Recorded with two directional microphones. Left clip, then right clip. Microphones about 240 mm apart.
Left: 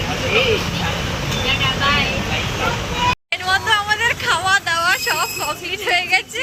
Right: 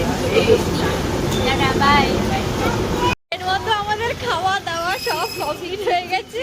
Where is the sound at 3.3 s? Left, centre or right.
Centre.